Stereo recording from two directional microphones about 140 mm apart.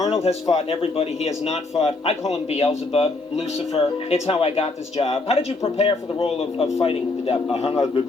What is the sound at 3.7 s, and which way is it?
A man's voice, 45° left (ahead or behind).